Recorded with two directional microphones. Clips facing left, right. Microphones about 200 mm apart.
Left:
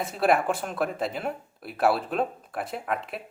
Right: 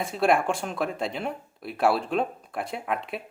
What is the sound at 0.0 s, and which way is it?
Speech, centre (ahead or behind).